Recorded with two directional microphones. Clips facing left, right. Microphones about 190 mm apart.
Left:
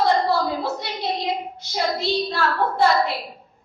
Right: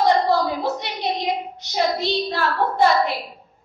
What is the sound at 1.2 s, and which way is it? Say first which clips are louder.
Child singing: right 1 dB; 20° right (ahead or behind).